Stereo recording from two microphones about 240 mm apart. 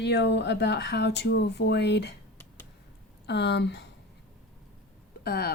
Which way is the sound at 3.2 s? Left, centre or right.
Left.